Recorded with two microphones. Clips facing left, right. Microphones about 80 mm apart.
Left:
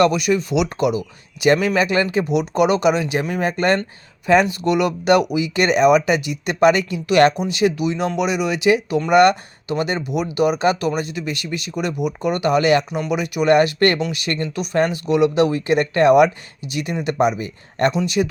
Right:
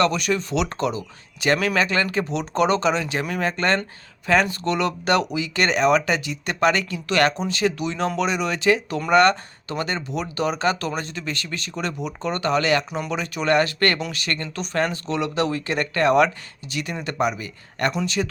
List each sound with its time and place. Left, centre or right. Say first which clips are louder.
0.0 s speech: left 5 dB; centre